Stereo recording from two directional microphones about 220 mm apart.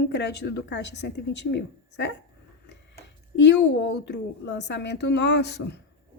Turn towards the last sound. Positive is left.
turn(degrees=50)  # may be behind; listen again after turning